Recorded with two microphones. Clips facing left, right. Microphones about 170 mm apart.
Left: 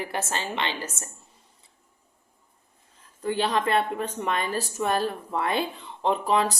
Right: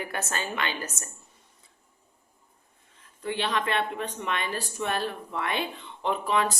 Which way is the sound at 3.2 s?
40° left (ahead or behind).